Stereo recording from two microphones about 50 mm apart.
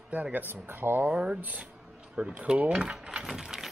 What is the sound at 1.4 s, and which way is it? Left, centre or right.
Speech, right.